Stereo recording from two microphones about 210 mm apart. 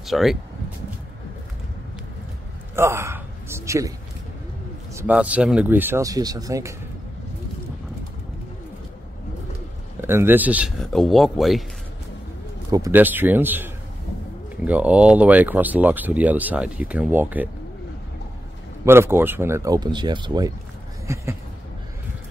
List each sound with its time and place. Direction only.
0.0 s speech: centre (ahead or behind)
2.7 s a man's voice: 10° right (ahead or behind)
4.9 s speech: 5° right (ahead or behind)
10.0 s speech: 10° right (ahead or behind)
12.7 s speech: 10° right (ahead or behind)
18.9 s speech: 10° right (ahead or behind)